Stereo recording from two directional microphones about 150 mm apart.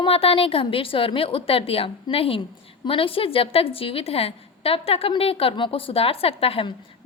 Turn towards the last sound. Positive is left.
turn(degrees=40)  # may be behind; listen again after turning